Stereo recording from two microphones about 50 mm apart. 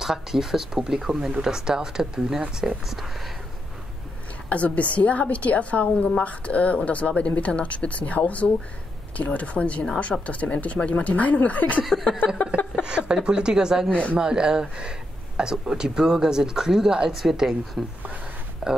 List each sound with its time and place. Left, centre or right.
0.0 s a woman's voice: centre
4.5 s a woman's voice: left
11.8 s a woman's voice: centre
12.8 s speech: centre
13.8 s a woman's voice: left
14.1 s a woman's voice: centre